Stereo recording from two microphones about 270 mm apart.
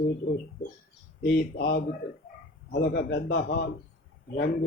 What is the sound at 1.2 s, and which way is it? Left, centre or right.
A man's voice, left.